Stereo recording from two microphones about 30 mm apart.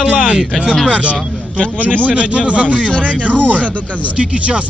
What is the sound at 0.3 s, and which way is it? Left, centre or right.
Speech, right.